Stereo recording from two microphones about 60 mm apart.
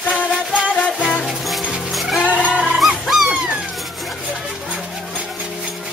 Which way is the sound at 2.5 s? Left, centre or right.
Centre.